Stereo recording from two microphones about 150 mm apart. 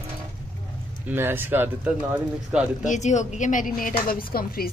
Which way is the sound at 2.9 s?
50° left (ahead or behind).